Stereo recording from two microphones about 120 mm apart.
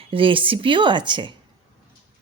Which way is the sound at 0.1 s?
45° right (ahead or behind).